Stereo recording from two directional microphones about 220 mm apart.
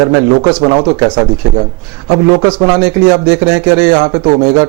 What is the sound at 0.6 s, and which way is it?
Speech, 25° right (ahead or behind).